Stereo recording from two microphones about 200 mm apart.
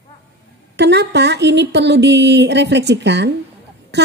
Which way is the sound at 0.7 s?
60° right (ahead or behind).